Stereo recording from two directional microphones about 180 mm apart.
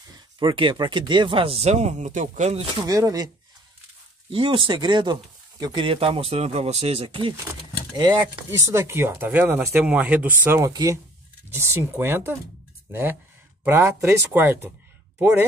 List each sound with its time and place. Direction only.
0.4 s speech: 25° right (ahead or behind)
2.9 s speech: 20° right (ahead or behind)
4.3 s speech: 30° right (ahead or behind)
7.9 s speech: 15° right (ahead or behind)
13.7 s speech: 15° right (ahead or behind)